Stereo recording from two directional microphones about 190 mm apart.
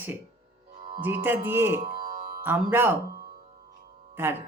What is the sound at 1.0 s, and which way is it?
Speech, 10° right (ahead or behind).